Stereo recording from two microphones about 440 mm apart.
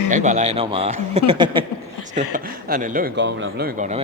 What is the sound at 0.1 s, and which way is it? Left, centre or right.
Speech, centre.